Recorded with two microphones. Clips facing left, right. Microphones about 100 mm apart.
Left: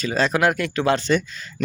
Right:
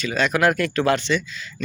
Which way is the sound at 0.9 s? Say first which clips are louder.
Left 2 dB; 40° left (ahead or behind).